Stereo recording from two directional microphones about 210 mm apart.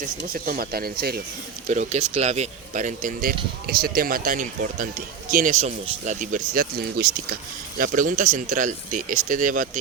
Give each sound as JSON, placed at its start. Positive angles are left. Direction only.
{"t": 0.0, "sound": "speech", "side_deg": -40}
{"t": 1.6, "sound": "speech", "side_deg": -35}